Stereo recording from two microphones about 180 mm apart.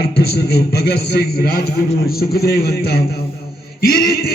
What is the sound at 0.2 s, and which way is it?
A man's voice, 60° left (ahead or behind).